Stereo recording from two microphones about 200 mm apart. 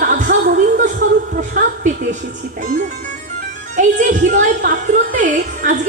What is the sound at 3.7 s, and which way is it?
A woman's voice, 40° right (ahead or behind).